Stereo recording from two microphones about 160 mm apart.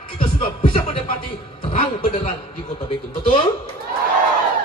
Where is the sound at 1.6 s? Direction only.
40° left (ahead or behind).